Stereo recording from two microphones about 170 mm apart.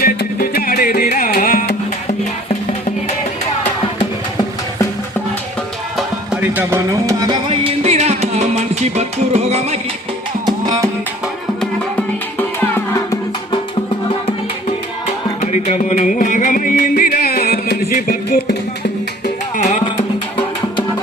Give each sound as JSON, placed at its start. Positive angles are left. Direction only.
{"t": 0.0, "sound": "music", "side_deg": 65}
{"t": 2.0, "sound": "music", "side_deg": 40}
{"t": 6.0, "sound": "music", "side_deg": -5}
{"t": 10.4, "sound": "music", "side_deg": -25}
{"t": 12.4, "sound": "music", "side_deg": 10}
{"t": 15.0, "sound": "music", "side_deg": 40}
{"t": 19.5, "sound": "music", "side_deg": 45}